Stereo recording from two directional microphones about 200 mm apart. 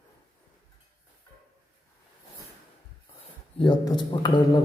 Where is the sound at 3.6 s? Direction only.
20° left (ahead or behind).